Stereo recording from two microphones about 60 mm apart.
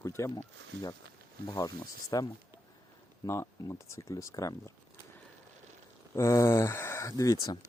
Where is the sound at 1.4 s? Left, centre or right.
Left.